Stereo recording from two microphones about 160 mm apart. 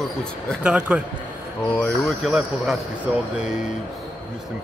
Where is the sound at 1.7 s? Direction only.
5° left (ahead or behind).